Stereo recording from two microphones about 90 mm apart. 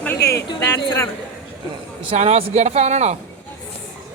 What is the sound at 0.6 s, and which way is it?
Speech, 40° left (ahead or behind).